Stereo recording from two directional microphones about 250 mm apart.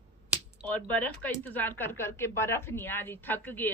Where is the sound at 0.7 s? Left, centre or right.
Centre.